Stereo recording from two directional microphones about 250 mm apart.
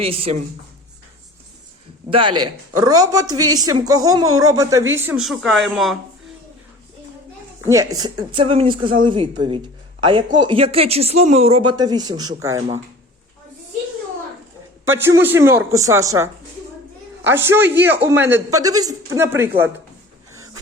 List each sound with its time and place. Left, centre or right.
0.0 s speech: right
2.0 s speech: right; by 6.0 s centre
7.6 s speech: centre
14.8 s speech: centre